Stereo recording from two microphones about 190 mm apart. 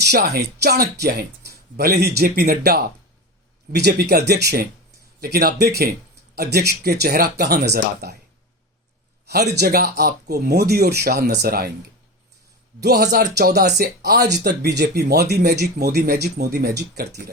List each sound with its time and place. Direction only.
0.1 s speech: 55° right (ahead or behind)
9.2 s speech: 60° right (ahead or behind)
12.8 s speech: 60° right (ahead or behind)